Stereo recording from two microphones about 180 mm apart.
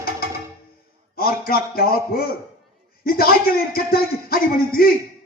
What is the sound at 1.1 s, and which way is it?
A man's voice, 55° left (ahead or behind).